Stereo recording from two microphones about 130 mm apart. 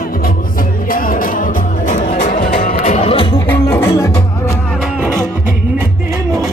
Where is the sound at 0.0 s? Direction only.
90° left.